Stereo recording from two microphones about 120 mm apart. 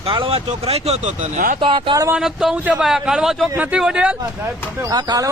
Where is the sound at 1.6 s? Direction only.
45° right (ahead or behind).